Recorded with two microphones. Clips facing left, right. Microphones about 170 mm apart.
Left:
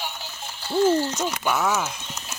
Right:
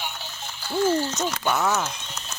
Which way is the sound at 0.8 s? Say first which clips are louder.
Left 2 dB; 20° left (ahead or behind).